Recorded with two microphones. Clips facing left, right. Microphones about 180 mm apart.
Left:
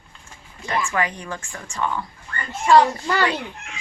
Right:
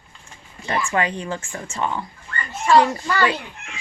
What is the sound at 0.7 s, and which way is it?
A woman's voice, 25° right (ahead or behind).